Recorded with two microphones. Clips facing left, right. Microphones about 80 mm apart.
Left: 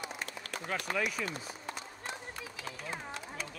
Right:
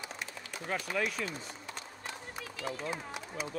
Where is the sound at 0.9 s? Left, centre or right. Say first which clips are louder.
Right 1 dB; centre.